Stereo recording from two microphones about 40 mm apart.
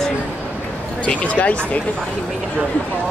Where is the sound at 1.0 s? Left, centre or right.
Left.